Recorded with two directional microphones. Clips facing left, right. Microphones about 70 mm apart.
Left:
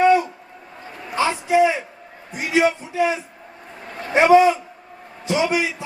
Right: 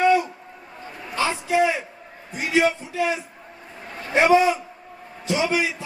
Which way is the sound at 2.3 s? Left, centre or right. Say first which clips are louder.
Left 2 dB; left.